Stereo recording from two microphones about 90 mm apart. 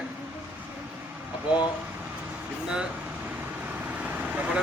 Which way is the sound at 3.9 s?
15° right (ahead or behind).